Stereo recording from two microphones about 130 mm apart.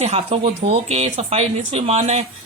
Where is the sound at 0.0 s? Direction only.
50° right (ahead or behind).